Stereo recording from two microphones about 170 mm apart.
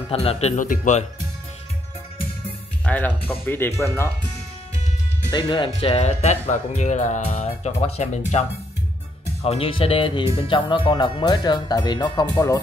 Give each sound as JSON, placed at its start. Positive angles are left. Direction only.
{"t": 0.1, "sound": "speech", "side_deg": 35}
{"t": 2.8, "sound": "music", "side_deg": 10}
{"t": 3.3, "sound": "speech", "side_deg": 10}
{"t": 5.3, "sound": "speech", "side_deg": 25}